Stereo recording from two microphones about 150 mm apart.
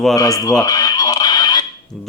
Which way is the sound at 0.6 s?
25° left (ahead or behind).